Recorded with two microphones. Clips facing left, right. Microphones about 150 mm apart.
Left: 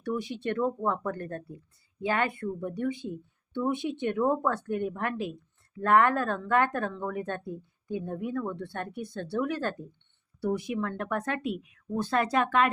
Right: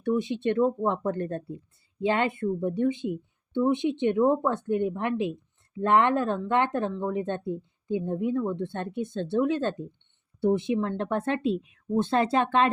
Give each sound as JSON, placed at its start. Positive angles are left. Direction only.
{"t": 0.0, "sound": "speech", "side_deg": -20}